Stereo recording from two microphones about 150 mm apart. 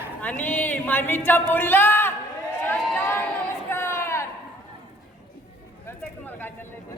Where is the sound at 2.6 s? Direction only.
10° left (ahead or behind).